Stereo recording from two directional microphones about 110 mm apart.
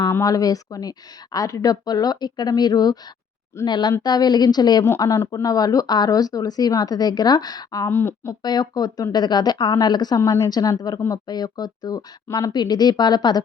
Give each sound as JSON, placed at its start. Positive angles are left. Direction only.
{"t": 0.0, "sound": "speech", "side_deg": 30}
{"t": 4.9, "sound": "speech", "side_deg": 25}
{"t": 7.9, "sound": "speech", "side_deg": 20}
{"t": 8.3, "sound": "speech", "side_deg": 40}